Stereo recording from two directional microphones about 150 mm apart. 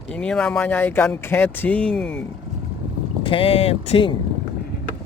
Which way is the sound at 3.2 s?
35° left (ahead or behind).